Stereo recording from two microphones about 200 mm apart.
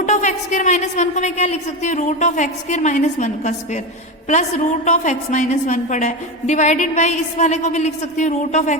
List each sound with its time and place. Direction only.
0.0 s a woman's voice: 40° left (ahead or behind)